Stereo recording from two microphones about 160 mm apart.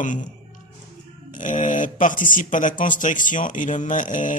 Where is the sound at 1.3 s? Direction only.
55° left (ahead or behind).